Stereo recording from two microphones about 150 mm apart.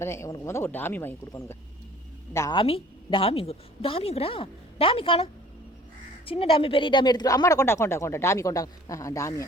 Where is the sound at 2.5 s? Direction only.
35° left (ahead or behind).